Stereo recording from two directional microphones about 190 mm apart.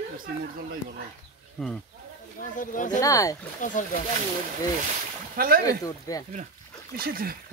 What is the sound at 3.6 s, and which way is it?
Speech, 40° left (ahead or behind).